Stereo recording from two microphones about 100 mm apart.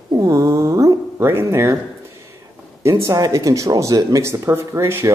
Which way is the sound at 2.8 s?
30° right (ahead or behind).